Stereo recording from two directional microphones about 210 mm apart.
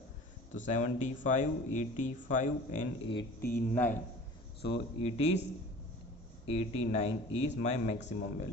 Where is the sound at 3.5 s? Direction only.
10° left (ahead or behind).